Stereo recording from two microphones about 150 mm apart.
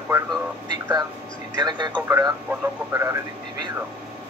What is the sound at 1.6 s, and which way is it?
Speech, 30° right (ahead or behind).